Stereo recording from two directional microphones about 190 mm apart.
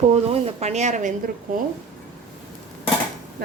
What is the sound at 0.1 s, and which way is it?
Speech, 35° right (ahead or behind).